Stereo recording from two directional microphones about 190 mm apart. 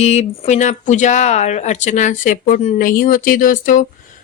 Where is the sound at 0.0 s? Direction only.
35° left (ahead or behind).